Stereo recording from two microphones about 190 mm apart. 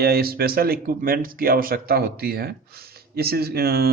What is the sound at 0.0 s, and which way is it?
Speech, 55° right (ahead or behind).